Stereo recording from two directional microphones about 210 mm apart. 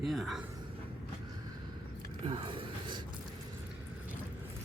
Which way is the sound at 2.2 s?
25° right (ahead or behind).